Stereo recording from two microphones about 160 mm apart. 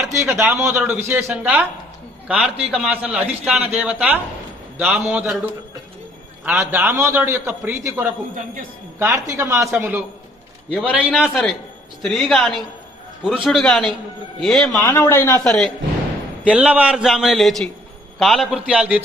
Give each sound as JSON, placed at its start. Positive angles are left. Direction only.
{"t": 0.1, "sound": "a man's voice", "side_deg": -15}
{"t": 6.4, "sound": "a man's voice", "side_deg": -10}
{"t": 14.8, "sound": "speech", "side_deg": 15}
{"t": 15.4, "sound": "a man's voice", "side_deg": 0}